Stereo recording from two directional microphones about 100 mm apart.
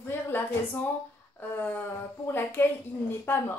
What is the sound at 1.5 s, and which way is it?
A woman's voice, 20° left (ahead or behind).